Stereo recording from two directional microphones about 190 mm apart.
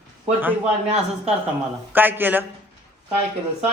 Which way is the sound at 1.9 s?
10° right (ahead or behind).